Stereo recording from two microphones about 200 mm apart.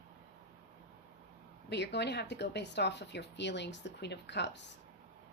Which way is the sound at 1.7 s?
55° left (ahead or behind).